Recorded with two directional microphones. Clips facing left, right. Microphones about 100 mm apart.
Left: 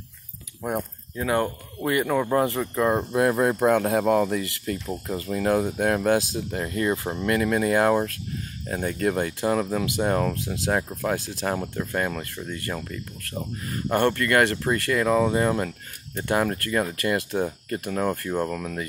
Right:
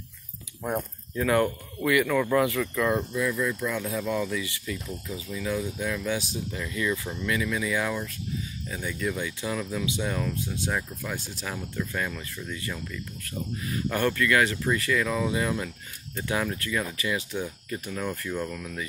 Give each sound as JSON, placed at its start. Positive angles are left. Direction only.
{"t": 1.1, "sound": "speech", "side_deg": 20}
{"t": 3.1, "sound": "speech", "side_deg": 60}
{"t": 5.0, "sound": "speech", "side_deg": 60}
{"t": 10.3, "sound": "speech", "side_deg": 90}
{"t": 10.7, "sound": "speech", "side_deg": 40}
{"t": 11.4, "sound": "speech", "side_deg": 50}
{"t": 17.9, "sound": "speech", "side_deg": 35}
{"t": 18.5, "sound": "speech", "side_deg": 50}